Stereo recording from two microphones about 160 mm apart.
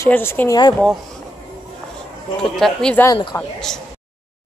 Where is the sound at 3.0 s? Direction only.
25° left (ahead or behind).